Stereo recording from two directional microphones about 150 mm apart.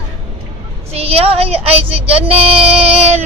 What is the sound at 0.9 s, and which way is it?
Child singing, 40° right (ahead or behind).